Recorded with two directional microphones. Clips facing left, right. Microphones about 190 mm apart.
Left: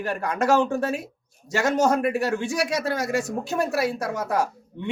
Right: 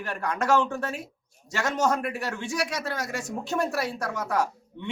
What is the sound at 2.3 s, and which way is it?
Speech, 10° left (ahead or behind).